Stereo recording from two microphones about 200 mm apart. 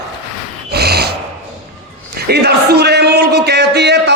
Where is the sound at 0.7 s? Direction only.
55° right (ahead or behind).